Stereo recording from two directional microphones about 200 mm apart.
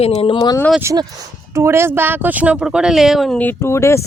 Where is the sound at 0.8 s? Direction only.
15° right (ahead or behind).